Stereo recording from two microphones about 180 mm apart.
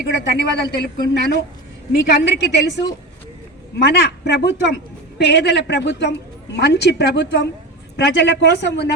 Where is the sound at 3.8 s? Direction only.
65° left (ahead or behind).